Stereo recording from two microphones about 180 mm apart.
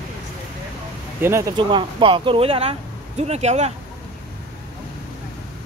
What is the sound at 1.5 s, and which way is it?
Speech, 25° right (ahead or behind).